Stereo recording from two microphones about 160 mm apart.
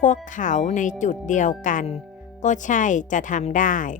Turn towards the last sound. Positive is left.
turn(degrees=55)  # may be behind; listen again after turning